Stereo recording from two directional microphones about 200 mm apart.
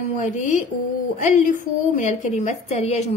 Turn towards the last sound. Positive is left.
turn(degrees=35)  # may be behind; listen again after turning